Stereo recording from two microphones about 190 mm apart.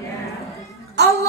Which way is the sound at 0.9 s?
65° right (ahead or behind).